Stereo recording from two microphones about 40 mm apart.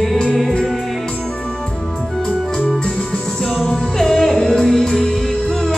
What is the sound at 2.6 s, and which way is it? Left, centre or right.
Organ, centre.